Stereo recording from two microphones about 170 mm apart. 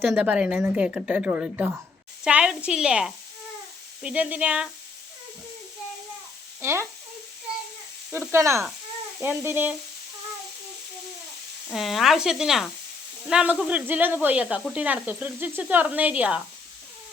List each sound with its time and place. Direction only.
0.1 s a woman's voice: 10° right (ahead or behind)
6.6 s speech: 15° right (ahead or behind)
8.1 s a woman's voice: 15° right (ahead or behind)
11.7 s a woman's voice: centre (ahead or behind)